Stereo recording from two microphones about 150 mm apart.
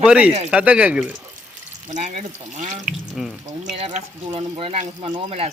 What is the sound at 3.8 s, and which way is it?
Speech, 45° right (ahead or behind).